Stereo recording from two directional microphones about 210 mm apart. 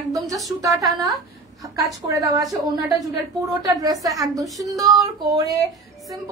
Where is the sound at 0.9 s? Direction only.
15° right (ahead or behind).